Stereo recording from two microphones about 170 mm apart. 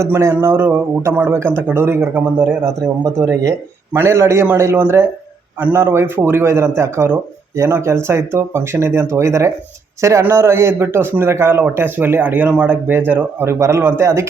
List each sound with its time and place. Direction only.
0.0 s a man's voice: 15° right (ahead or behind)